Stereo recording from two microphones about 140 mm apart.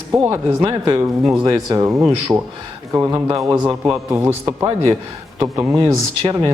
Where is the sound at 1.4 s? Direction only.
25° right (ahead or behind).